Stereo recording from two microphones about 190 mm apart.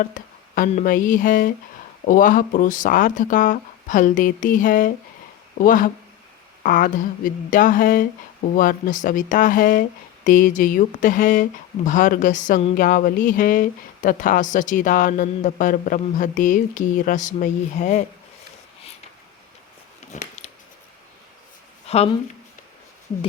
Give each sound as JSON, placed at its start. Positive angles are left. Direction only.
{"t": 0.0, "sound": "speech", "side_deg": 45}
{"t": 20.1, "sound": "a sound", "side_deg": 35}
{"t": 21.8, "sound": "speech", "side_deg": 30}